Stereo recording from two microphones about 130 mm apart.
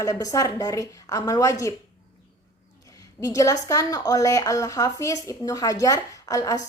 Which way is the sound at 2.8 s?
25° left (ahead or behind).